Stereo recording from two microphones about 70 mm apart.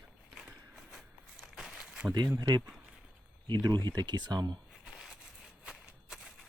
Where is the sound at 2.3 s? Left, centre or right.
Right.